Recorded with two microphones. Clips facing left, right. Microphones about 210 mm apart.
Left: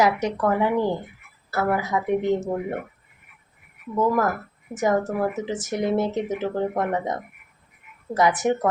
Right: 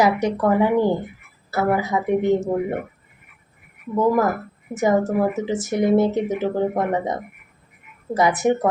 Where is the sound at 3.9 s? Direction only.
10° right (ahead or behind).